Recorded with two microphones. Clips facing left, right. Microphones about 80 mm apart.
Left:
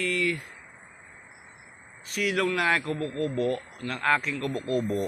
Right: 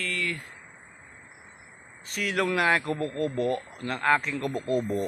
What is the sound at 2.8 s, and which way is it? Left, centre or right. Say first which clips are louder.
Speech: right 1 dB; centre.